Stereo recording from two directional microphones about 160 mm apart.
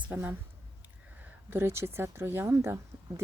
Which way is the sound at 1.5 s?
15° right (ahead or behind).